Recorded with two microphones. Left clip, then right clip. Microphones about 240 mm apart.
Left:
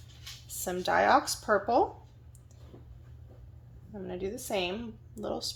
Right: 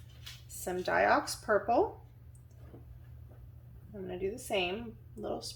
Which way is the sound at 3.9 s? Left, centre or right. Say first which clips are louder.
Left 1 dB; left.